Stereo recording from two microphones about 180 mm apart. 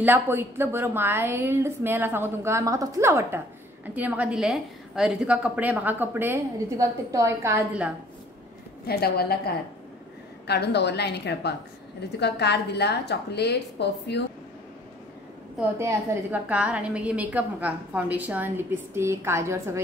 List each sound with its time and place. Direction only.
0.0 s a woman's voice: 10° right (ahead or behind)
8.8 s a woman's voice: 60° left (ahead or behind)
10.4 s a woman's voice: 65° left (ahead or behind)
15.8 s a woman's voice: 10° right (ahead or behind)